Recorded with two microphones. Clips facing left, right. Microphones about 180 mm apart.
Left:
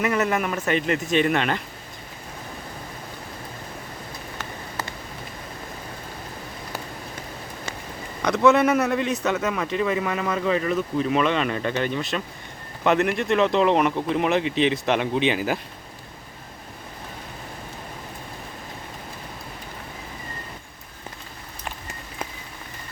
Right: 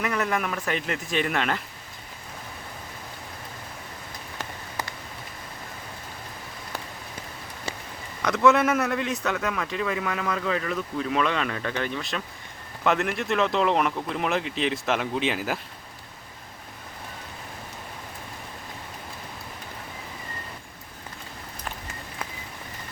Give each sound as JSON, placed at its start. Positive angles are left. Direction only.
{"t": 0.0, "sound": "speech", "side_deg": 5}
{"t": 8.4, "sound": "speech", "side_deg": 0}